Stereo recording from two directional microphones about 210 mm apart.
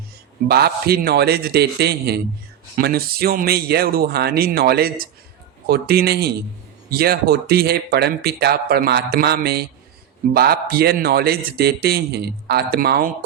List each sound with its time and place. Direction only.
0.4 s speech: 50° right (ahead or behind)